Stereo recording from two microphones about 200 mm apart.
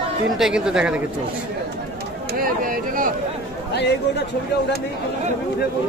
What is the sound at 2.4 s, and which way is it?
Speech, 45° right (ahead or behind).